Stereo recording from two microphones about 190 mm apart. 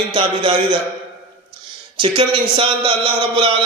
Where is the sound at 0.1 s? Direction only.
25° right (ahead or behind).